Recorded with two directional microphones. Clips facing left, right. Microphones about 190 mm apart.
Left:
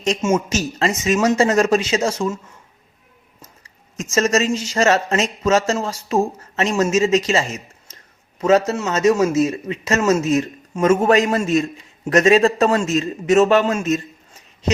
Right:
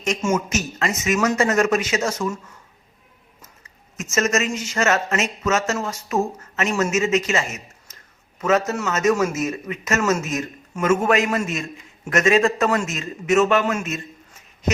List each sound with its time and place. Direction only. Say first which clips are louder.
0.0 s a man's voice: left 3 dB; 30° left (ahead or behind)
3.4 s a man's voice: left 4 dB; 30° left (ahead or behind)